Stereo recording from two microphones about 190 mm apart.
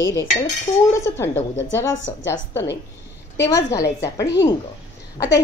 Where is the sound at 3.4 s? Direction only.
15° left (ahead or behind).